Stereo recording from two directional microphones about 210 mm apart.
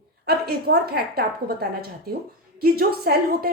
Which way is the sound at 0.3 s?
50° right (ahead or behind).